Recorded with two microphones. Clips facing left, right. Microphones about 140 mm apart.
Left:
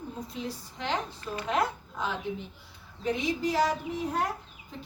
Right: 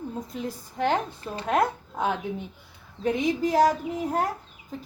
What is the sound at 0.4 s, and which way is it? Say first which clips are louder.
A woman's voice: right 10 dB; 50° right (ahead or behind).